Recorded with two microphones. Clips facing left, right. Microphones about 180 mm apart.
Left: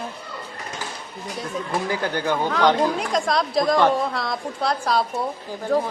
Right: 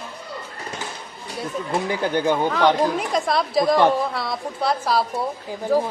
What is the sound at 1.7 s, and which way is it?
Speech, 20° right (ahead or behind).